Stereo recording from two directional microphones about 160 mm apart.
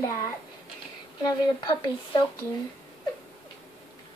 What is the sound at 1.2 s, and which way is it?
Speech, 25° left (ahead or behind).